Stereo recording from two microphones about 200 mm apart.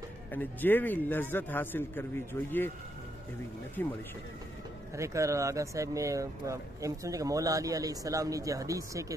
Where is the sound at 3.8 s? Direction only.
10° left (ahead or behind).